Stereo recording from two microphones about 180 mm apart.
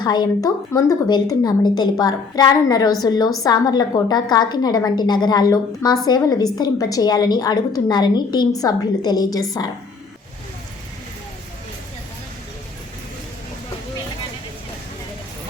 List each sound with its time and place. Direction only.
0.0 s a woman's voice: 25° left (ahead or behind)